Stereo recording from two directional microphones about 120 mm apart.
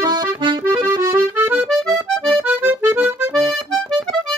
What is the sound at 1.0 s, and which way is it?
Accordion, 20° right (ahead or behind).